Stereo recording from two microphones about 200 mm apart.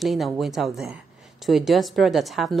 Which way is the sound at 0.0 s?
Centre (ahead or behind).